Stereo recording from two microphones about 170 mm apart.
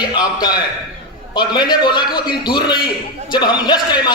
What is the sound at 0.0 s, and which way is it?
A man's voice, 25° left (ahead or behind).